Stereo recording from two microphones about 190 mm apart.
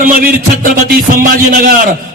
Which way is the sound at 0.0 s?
45° right (ahead or behind).